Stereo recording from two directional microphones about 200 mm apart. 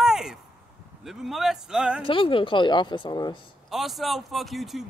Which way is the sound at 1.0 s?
Centre (ahead or behind).